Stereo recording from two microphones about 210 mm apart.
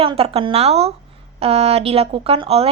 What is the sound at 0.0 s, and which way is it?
A woman's voice, 25° right (ahead or behind).